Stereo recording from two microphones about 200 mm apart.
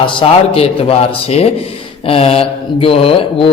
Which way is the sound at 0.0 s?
25° left (ahead or behind).